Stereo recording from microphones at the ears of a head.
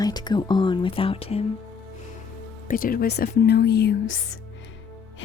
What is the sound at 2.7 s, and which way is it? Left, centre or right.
Speech, left.